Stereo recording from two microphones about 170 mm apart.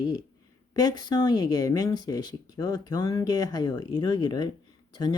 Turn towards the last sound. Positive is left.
turn(degrees=25)  # may be behind; listen again after turning